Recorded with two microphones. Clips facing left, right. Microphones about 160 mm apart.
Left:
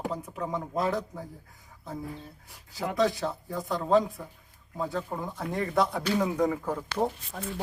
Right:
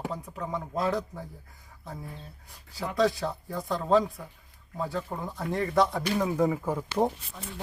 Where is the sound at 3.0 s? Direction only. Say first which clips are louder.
Right 1 dB; centre (ahead or behind).